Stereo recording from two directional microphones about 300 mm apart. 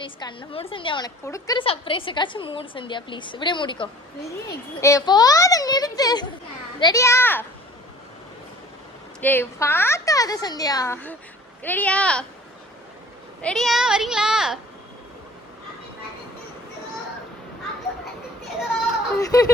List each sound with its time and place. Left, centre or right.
0.0 s a woman's voice: centre
9.2 s a woman's voice: centre
13.4 s speech: centre
19.1 s speech: centre